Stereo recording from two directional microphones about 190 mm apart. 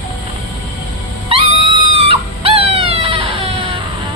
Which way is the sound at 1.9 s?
30° right (ahead or behind).